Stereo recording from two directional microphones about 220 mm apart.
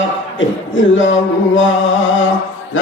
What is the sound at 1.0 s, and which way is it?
Music, 60° left (ahead or behind).